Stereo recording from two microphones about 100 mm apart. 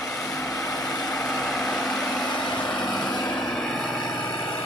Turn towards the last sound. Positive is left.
turn(degrees=5)  # may be behind; listen again after turning